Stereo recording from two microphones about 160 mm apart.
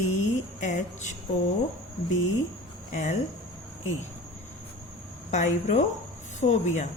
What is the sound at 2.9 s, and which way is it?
Speech, 45° left (ahead or behind).